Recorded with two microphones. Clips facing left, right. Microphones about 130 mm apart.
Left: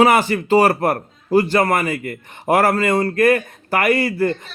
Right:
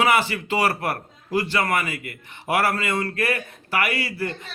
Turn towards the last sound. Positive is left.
turn(degrees=50)  # may be behind; listen again after turning